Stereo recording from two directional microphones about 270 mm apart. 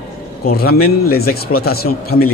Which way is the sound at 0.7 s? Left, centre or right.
Left.